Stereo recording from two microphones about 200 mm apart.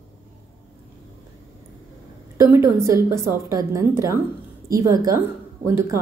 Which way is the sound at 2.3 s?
15° right (ahead or behind).